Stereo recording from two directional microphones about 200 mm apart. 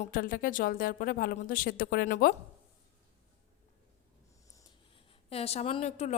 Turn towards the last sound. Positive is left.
turn(degrees=35)  # may be behind; listen again after turning